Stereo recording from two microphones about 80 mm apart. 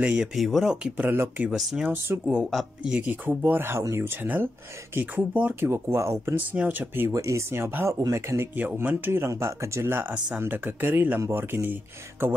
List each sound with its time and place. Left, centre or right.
0.0 s speech: centre
0.3 s speech: centre
0.8 s speech: right
1.5 s speech: centre
1.9 s speech: right
2.5 s speech: centre
3.1 s speech: right
5.7 s speech: right
6.3 s speech: right
7.1 s speech: right
8.5 s speech: right
9.3 s speech: right
10.1 s speech: centre
10.4 s speech: right